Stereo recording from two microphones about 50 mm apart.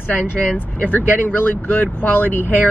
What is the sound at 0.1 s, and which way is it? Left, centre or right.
Speech, left.